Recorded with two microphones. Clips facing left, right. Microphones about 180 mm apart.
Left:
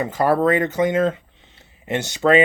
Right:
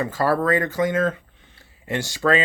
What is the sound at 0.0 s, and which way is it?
Speech, 20° left (ahead or behind).